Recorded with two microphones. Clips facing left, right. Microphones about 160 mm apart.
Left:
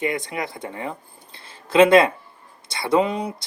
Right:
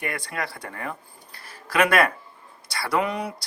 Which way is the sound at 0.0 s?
20° left (ahead or behind).